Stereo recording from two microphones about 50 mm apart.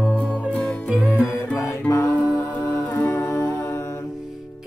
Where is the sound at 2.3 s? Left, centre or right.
Left.